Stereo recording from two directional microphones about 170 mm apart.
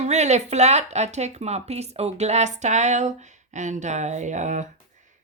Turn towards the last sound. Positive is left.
turn(degrees=-45)  # may be behind; listen again after turning